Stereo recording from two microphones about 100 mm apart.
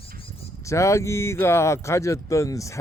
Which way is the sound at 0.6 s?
30° left (ahead or behind).